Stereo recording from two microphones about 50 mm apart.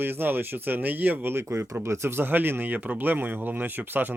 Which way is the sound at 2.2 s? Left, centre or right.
Right.